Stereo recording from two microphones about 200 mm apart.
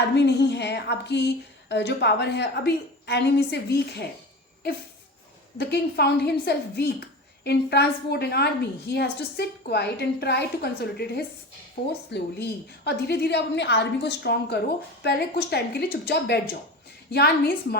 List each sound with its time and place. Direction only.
0.1 s a woman's voice: 55° left (ahead or behind)